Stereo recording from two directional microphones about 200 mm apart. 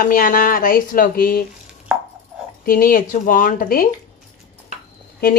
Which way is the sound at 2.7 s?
45° left (ahead or behind).